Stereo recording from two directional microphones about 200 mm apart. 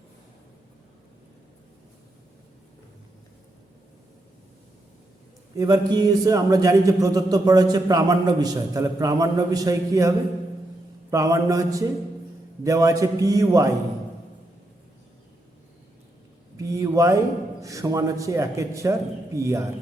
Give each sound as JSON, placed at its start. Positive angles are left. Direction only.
{"t": 5.5, "sound": "a man's voice", "side_deg": -20}
{"t": 11.1, "sound": "a man's voice", "side_deg": -15}
{"t": 16.6, "sound": "a man's voice", "side_deg": -15}